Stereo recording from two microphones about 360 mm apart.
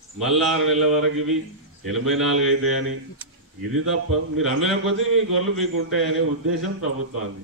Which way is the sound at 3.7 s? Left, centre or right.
Right.